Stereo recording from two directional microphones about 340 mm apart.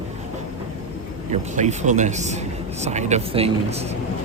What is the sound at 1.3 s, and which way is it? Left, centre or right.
Speech, centre.